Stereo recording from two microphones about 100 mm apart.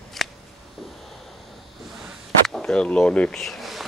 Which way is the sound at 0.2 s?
Centre (ahead or behind).